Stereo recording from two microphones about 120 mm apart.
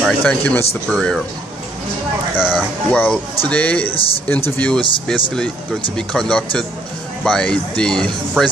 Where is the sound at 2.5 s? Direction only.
10° left (ahead or behind).